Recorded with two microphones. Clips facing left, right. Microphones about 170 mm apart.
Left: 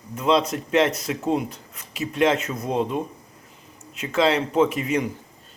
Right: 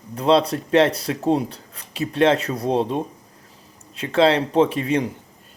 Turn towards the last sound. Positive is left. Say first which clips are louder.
# right 2 dB
turn(degrees=-30)  # may be behind; listen again after turning